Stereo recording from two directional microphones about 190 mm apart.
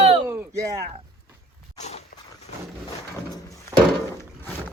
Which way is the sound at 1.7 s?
35° left (ahead or behind).